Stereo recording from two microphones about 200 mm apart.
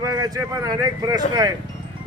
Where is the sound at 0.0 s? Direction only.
20° right (ahead or behind).